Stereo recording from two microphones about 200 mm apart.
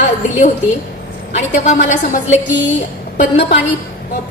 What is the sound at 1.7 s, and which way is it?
Speech, 40° left (ahead or behind).